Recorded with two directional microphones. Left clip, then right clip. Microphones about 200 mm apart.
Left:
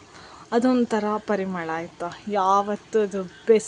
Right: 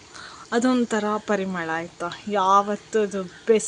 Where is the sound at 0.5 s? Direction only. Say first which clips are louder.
Left 1 dB; 5° left (ahead or behind).